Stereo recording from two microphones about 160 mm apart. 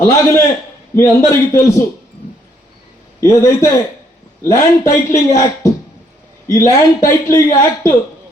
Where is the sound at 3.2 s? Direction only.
20° left (ahead or behind).